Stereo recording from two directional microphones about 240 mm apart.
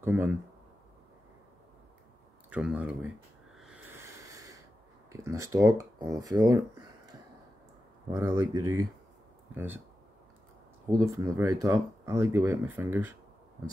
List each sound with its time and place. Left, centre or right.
0.0 s speech: centre
2.5 s speech: centre
3.5 s a sound: centre
5.1 s speech: centre
8.1 s speech: centre
10.9 s speech: centre